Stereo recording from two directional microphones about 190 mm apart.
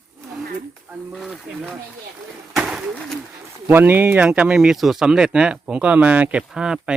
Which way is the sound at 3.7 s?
10° right (ahead or behind).